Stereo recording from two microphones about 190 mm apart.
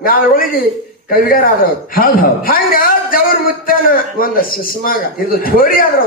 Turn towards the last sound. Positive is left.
turn(degrees=50)  # may be behind; listen again after turning